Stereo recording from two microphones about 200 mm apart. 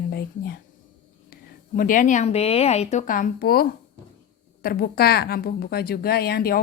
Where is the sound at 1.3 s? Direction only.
45° left (ahead or behind).